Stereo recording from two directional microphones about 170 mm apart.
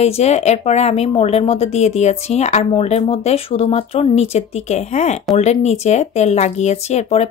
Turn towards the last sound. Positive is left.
turn(degrees=40)  # may be behind; listen again after turning